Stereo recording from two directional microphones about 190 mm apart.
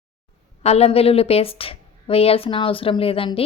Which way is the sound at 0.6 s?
35° left (ahead or behind).